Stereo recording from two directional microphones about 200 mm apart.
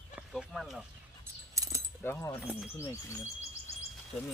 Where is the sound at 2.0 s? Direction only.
10° left (ahead or behind).